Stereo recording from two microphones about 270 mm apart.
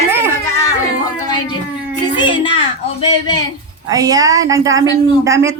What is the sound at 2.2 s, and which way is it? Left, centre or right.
Speech, centre.